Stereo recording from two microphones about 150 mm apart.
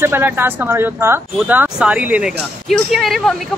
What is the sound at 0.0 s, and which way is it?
Speech, 15° right (ahead or behind).